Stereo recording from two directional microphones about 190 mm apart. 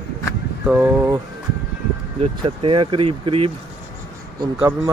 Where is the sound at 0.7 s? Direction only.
10° right (ahead or behind).